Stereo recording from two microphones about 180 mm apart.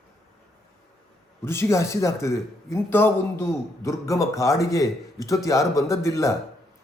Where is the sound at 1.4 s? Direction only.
15° left (ahead or behind).